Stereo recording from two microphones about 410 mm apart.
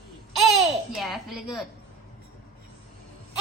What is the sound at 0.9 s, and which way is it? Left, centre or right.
Speech, centre.